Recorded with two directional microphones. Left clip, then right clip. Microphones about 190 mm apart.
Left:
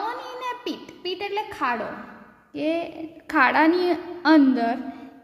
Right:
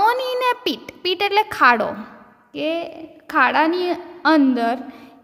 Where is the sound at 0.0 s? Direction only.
45° right (ahead or behind).